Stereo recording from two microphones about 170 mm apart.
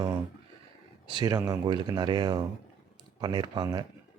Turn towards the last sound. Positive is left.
turn(degrees=-25)  # may be behind; listen again after turning